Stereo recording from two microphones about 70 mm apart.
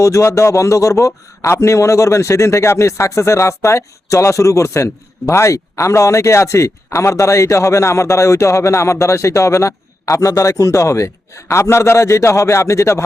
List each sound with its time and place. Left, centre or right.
0.0 s speech: left